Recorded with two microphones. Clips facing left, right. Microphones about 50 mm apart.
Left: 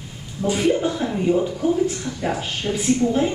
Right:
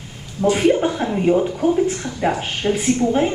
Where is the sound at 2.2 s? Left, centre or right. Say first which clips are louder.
Right 5 dB; centre.